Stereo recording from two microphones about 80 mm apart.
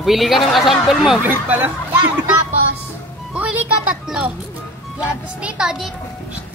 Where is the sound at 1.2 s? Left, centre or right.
Right.